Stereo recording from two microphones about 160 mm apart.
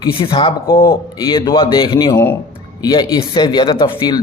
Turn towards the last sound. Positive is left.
turn(degrees=30)  # may be behind; listen again after turning